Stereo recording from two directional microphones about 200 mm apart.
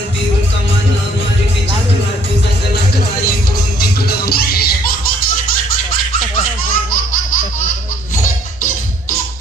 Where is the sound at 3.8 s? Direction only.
50° left (ahead or behind).